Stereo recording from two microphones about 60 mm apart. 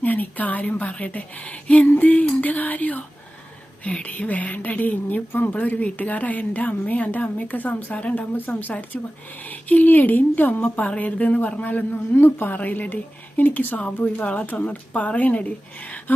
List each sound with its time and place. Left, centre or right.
0.0 s a woman's voice: left